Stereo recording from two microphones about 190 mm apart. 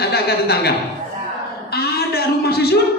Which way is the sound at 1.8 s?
55° left (ahead or behind).